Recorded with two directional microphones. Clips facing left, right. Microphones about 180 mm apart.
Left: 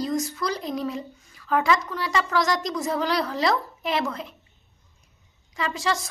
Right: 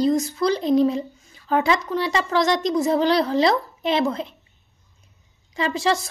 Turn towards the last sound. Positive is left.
turn(degrees=-30)  # may be behind; listen again after turning